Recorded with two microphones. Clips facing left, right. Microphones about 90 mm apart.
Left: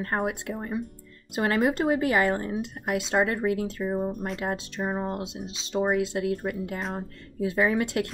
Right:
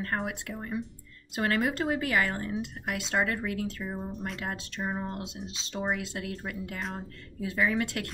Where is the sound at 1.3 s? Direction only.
20° left (ahead or behind).